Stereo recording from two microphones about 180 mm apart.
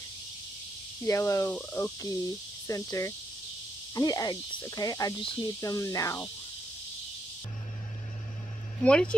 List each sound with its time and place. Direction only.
1.0 s speech: 15° left (ahead or behind)
8.8 s speech: 5° left (ahead or behind)